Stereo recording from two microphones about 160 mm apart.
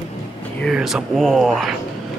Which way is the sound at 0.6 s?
Centre (ahead or behind).